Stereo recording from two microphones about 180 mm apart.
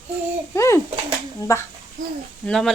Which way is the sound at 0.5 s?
15° left (ahead or behind).